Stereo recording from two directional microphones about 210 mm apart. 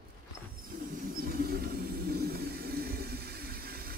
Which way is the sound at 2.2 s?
45° right (ahead or behind).